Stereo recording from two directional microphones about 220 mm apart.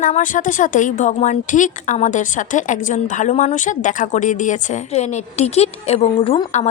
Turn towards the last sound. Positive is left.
turn(degrees=30)  # may be behind; listen again after turning